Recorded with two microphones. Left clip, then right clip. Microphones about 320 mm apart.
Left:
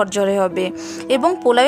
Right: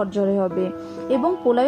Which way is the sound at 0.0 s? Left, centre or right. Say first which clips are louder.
Left 5 dB; left.